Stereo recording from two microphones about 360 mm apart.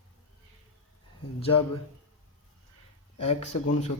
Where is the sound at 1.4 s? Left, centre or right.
Centre.